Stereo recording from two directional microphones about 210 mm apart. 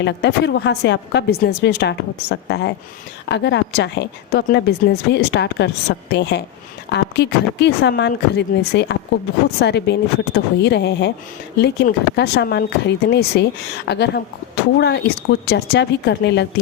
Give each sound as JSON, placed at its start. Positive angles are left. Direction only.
{"t": 0.0, "sound": "a woman's voice", "side_deg": 55}